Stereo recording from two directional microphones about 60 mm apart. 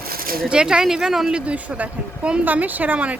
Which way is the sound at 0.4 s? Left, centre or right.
Centre.